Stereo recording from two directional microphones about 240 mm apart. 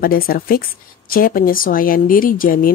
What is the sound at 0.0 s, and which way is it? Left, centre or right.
Speech, left.